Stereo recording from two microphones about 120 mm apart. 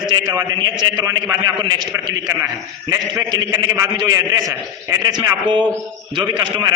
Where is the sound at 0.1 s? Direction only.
35° right (ahead or behind).